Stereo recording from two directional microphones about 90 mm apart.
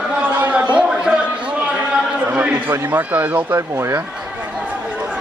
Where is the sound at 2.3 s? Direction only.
15° right (ahead or behind).